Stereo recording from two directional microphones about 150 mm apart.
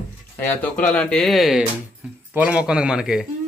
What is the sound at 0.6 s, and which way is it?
A man's voice, 10° left (ahead or behind).